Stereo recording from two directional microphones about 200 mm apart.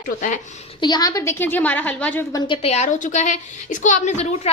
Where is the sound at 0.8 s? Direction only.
20° left (ahead or behind).